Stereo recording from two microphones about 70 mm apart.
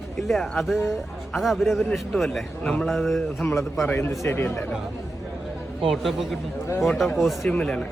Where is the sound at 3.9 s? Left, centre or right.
Left.